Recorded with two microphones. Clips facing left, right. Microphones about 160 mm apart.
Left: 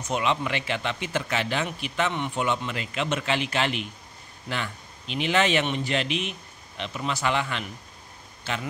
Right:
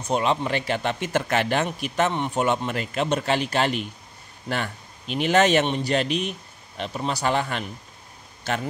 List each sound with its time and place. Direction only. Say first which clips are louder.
0.0 s a man's voice: right 3 dB; 35° right (ahead or behind)